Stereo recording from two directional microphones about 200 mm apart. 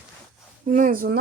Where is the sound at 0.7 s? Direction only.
40° right (ahead or behind).